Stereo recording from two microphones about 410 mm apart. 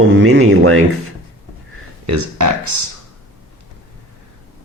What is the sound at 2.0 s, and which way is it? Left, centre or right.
Speech, right.